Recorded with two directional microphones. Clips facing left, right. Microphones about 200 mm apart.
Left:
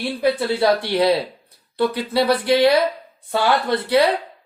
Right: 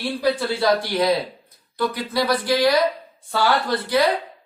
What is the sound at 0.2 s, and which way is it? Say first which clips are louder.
Speech: left 3 dB; 25° left (ahead or behind).